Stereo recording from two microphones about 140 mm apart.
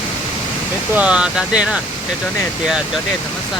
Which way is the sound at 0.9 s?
10° right (ahead or behind).